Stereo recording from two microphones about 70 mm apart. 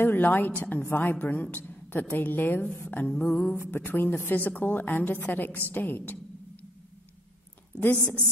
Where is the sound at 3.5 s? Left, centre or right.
Left.